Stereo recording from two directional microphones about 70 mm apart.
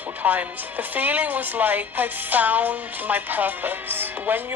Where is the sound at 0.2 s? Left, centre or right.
Right.